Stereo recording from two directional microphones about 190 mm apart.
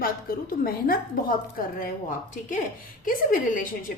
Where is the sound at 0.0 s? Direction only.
50° left (ahead or behind).